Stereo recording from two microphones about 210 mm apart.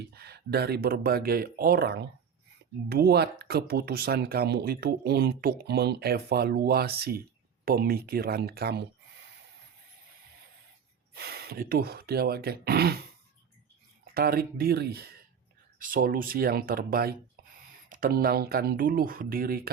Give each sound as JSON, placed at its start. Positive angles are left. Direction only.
{"t": 0.1, "sound": "speech", "side_deg": -50}
{"t": 11.1, "sound": "speech", "side_deg": -50}
{"t": 14.0, "sound": "speech", "side_deg": -45}